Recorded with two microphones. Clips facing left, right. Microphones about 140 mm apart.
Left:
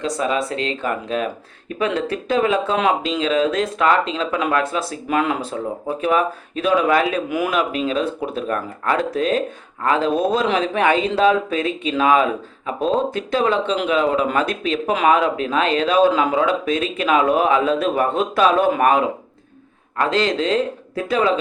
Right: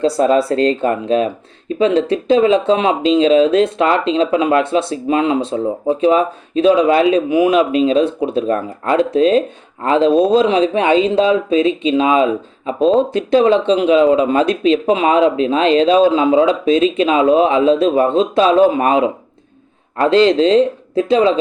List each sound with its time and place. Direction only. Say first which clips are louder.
0.0 s speech: right 8 dB; 35° right (ahead or behind)